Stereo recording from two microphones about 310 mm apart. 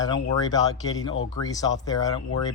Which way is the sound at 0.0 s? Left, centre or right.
Centre.